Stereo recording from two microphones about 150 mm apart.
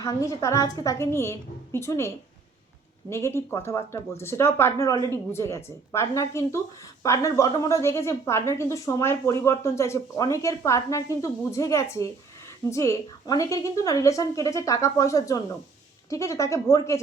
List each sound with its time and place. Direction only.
0.0 s a woman's voice: 20° left (ahead or behind)